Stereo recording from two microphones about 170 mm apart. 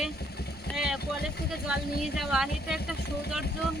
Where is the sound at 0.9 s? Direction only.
70° left (ahead or behind).